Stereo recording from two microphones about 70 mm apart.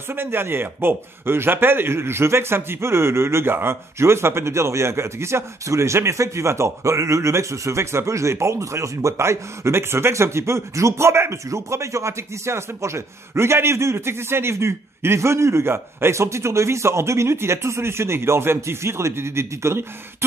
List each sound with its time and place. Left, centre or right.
0.1 s a man's voice: right